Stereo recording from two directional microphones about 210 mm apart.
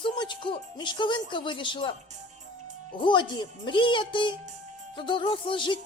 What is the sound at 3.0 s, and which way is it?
Music, 20° left (ahead or behind).